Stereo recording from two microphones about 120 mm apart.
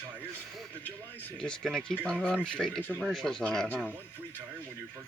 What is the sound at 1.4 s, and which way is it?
Speech, 5° left (ahead or behind).